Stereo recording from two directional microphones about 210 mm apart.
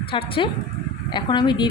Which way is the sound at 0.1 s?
25° left (ahead or behind).